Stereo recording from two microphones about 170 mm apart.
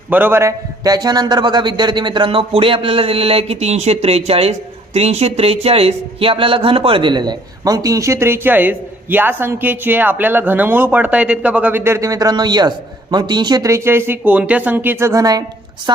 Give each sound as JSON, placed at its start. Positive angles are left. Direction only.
{"t": 0.1, "sound": "a man's voice", "side_deg": -10}